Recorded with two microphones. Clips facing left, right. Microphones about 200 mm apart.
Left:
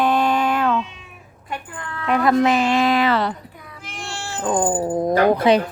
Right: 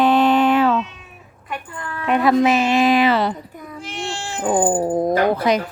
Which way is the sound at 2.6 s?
20° right (ahead or behind).